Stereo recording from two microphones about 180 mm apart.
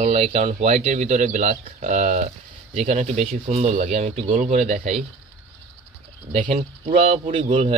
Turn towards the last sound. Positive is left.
turn(degrees=-30)  # may be behind; listen again after turning